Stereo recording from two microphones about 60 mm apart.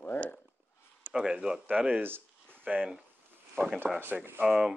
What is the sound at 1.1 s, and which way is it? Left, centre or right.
Speech, centre.